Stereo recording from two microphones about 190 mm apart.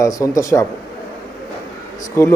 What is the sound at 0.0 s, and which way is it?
Speech, 15° left (ahead or behind).